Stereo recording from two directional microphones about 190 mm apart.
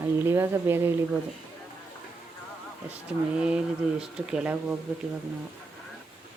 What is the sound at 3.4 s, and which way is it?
Speech, 5° right (ahead or behind).